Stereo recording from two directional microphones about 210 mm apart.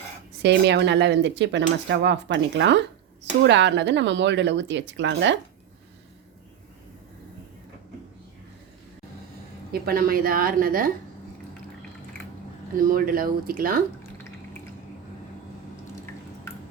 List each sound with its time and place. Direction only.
0.4 s speech: 55° right (ahead or behind)
9.7 s a woman's voice: 45° right (ahead or behind)
12.7 s a woman's voice: 40° right (ahead or behind)